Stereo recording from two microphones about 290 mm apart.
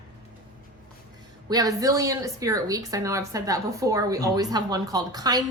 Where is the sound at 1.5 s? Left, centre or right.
Centre.